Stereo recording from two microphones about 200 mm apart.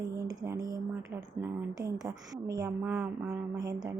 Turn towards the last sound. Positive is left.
turn(degrees=-20)  # may be behind; listen again after turning